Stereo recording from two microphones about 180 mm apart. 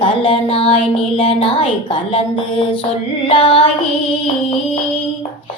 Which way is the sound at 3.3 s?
25° left (ahead or behind).